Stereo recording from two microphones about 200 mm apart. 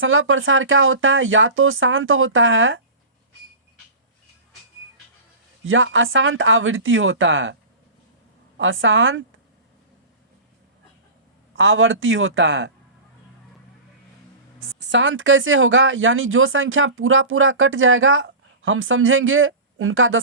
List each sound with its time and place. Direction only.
0.0 s speech: 80° right
5.6 s speech: 75° right (ahead or behind)
8.5 s speech: 70° right (ahead or behind)
11.5 s speech: 75° right (ahead or behind)
14.8 s speech: 65° right (ahead or behind); by 20.1 s 80° right